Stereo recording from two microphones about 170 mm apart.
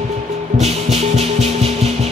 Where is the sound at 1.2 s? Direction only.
35° right (ahead or behind).